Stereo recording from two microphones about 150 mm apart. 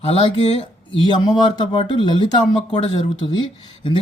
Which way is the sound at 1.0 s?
30° left (ahead or behind).